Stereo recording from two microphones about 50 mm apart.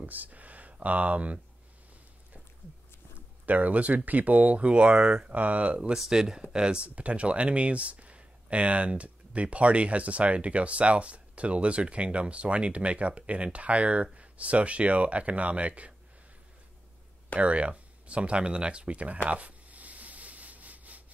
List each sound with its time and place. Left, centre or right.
0.0 s speech: right
3.2 s speech: right
6.0 s speech: centre; by 15.9 s right
17.4 s speech: right
19.2 s a sound: right